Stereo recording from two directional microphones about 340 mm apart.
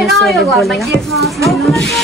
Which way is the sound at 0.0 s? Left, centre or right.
Centre.